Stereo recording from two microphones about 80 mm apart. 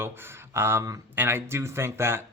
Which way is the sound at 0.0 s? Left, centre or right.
Right.